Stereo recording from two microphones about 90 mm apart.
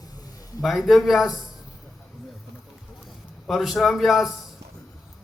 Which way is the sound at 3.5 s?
Centre (ahead or behind).